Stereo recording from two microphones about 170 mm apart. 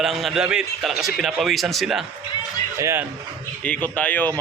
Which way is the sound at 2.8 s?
15° right (ahead or behind).